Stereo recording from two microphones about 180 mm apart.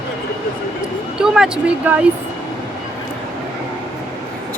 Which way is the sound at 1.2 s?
5° right (ahead or behind).